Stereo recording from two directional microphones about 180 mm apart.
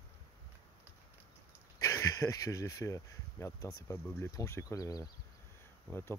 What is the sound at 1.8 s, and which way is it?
Speech, 20° left (ahead or behind).